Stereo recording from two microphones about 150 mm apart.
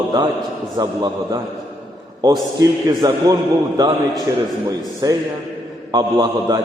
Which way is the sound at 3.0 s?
25° right (ahead or behind).